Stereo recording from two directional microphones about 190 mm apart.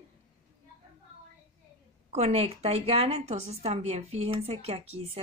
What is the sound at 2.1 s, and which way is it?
Speech, 35° right (ahead or behind).